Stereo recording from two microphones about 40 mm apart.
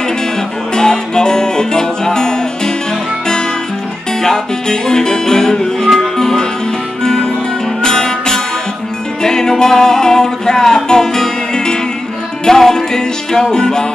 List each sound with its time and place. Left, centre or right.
0.7 s music: centre
4.2 s music: centre